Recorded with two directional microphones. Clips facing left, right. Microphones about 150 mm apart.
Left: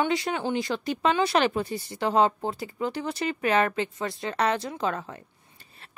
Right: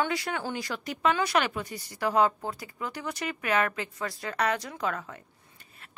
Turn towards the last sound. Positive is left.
turn(degrees=30)  # may be behind; listen again after turning